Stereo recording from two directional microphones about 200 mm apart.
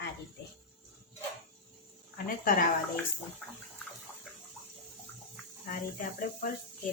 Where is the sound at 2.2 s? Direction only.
45° left (ahead or behind).